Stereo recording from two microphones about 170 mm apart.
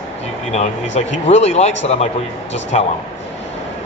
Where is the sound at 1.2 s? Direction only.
40° left (ahead or behind).